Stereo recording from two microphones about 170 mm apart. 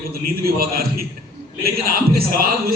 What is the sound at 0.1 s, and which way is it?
A man's voice, 65° right (ahead or behind).